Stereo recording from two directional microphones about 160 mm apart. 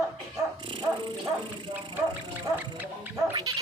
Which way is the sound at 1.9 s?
10° right (ahead or behind).